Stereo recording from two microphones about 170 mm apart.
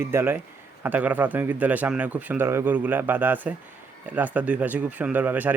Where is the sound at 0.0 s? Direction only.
15° right (ahead or behind).